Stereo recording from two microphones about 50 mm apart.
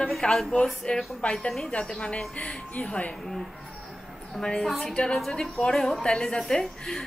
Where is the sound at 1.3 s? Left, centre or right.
Centre; by 3.1 s left.